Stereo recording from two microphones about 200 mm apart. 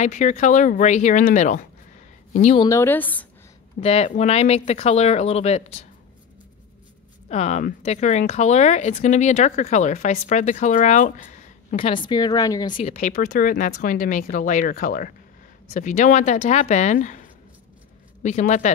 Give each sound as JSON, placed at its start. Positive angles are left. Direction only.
{"t": 0.0, "sound": "speech", "side_deg": 35}
{"t": 2.6, "sound": "a woman's voice", "side_deg": 15}
{"t": 3.8, "sound": "speech", "side_deg": 30}
{"t": 7.2, "sound": "speech", "side_deg": 35}
{"t": 11.7, "sound": "speech", "side_deg": 25}
{"t": 12.7, "sound": "speech", "side_deg": 35}
{"t": 18.2, "sound": "speech", "side_deg": 35}